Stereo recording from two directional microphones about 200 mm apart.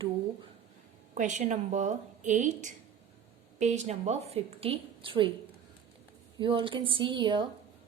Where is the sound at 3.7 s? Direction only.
35° right (ahead or behind).